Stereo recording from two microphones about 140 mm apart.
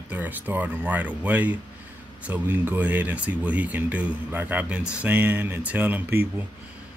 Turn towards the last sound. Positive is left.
turn(degrees=-15)  # may be behind; listen again after turning